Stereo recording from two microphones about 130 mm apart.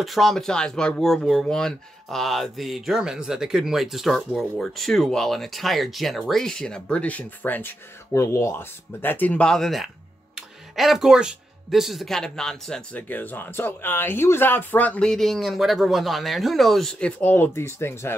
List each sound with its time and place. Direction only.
0.0 s speech: centre (ahead or behind)
17.2 s speech: 15° left (ahead or behind)